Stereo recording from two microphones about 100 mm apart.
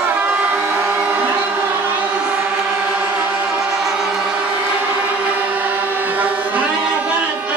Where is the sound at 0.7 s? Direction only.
20° right (ahead or behind).